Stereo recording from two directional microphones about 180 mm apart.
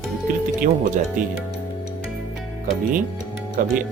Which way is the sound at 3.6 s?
50° right (ahead or behind).